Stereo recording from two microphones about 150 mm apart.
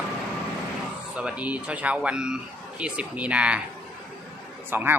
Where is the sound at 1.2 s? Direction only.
10° right (ahead or behind).